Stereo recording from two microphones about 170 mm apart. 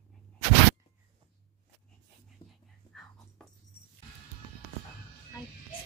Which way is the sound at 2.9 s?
5° left (ahead or behind).